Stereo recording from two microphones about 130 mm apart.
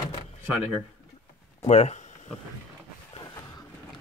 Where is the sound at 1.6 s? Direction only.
55° left (ahead or behind).